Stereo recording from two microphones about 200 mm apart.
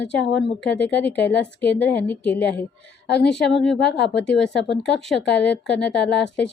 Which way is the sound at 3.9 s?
55° left (ahead or behind).